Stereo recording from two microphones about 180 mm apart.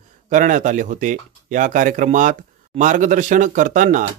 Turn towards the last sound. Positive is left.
turn(degrees=-45)  # may be behind; listen again after turning